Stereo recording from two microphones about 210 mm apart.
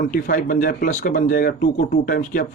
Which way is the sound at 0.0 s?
40° left (ahead or behind).